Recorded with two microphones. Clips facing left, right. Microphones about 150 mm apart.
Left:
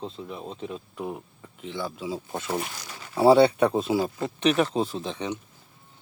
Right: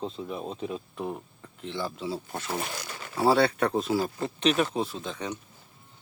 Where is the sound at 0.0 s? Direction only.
5° right (ahead or behind); by 4.9 s 25° left (ahead or behind).